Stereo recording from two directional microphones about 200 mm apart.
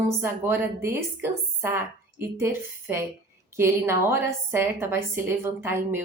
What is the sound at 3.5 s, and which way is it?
A woman's voice, 10° right (ahead or behind).